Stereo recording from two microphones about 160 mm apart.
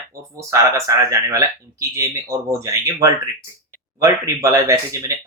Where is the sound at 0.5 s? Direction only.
20° right (ahead or behind).